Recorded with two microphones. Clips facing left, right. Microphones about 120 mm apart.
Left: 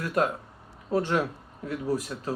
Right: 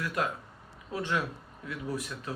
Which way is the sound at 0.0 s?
40° left (ahead or behind).